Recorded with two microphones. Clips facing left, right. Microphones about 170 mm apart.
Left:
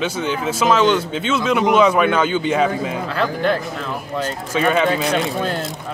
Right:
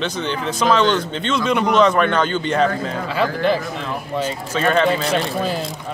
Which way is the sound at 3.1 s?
Centre (ahead or behind).